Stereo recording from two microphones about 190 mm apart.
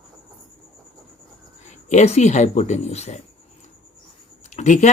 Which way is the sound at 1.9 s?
35° left (ahead or behind).